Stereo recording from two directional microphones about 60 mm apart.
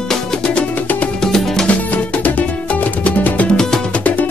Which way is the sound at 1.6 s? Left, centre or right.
Left.